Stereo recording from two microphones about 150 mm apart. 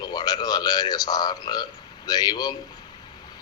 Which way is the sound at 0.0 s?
25° left (ahead or behind).